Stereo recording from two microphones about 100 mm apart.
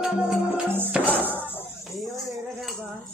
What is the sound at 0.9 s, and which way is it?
Tambourine, 20° right (ahead or behind).